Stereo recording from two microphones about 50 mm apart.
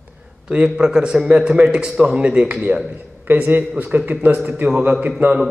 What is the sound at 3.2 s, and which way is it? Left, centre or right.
Speech, right.